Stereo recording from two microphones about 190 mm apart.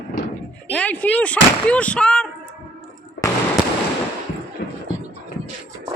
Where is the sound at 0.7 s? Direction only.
5° left (ahead or behind).